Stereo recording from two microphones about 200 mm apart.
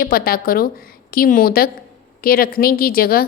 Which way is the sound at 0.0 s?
50° left (ahead or behind).